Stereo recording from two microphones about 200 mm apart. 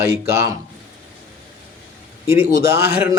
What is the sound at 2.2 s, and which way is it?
Speech, 15° right (ahead or behind).